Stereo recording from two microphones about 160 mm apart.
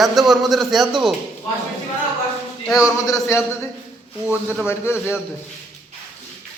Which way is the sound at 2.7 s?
20° left (ahead or behind).